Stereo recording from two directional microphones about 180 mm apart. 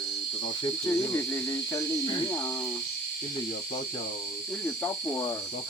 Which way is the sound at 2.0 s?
25° left (ahead or behind).